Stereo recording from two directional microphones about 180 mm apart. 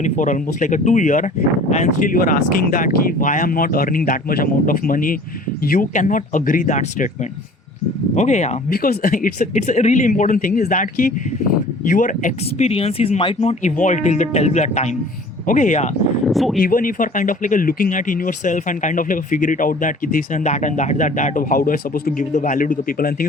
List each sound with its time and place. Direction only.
0.0 s speech: 45° left (ahead or behind)
8.1 s speech: 40° left (ahead or behind)
8.7 s speech: 55° left (ahead or behind)
16.2 s speech: centre (ahead or behind)
16.6 s speech: 50° left (ahead or behind)